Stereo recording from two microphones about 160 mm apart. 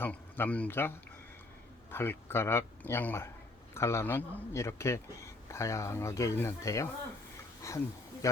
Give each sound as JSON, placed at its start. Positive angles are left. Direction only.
{"t": 0.0, "sound": "a man's voice", "side_deg": 10}